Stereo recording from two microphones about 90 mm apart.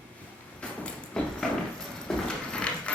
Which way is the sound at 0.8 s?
10° left (ahead or behind).